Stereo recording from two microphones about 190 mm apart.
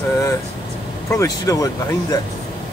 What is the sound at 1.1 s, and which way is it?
Speech, 15° left (ahead or behind).